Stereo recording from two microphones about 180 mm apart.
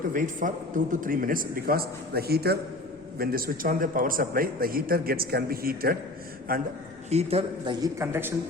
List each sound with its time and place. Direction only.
0.1 s a man's voice: 50° right (ahead or behind)
7.1 s a man's voice: 35° right (ahead or behind)
7.8 s speech: 15° right (ahead or behind)